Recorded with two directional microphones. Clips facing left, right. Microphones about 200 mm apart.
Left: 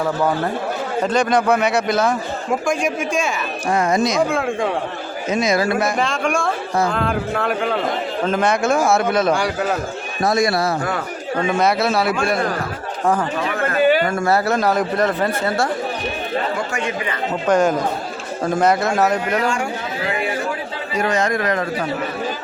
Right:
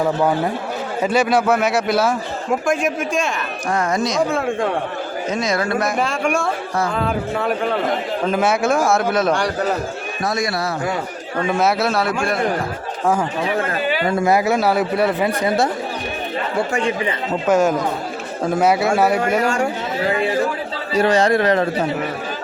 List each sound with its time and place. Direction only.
1.0 s a man's voice: 5° right (ahead or behind)
3.7 s speech: 10° left (ahead or behind)
4.3 s a man's voice: centre (ahead or behind)
5.7 s a man's voice: 5° right (ahead or behind)
11.5 s a man's voice: 5° right (ahead or behind)
14.1 s speech: 15° right (ahead or behind)
17.4 s a man's voice: 5° right (ahead or behind)
19.4 s a man's voice: 40° right (ahead or behind)
20.9 s a man's voice: 30° right (ahead or behind)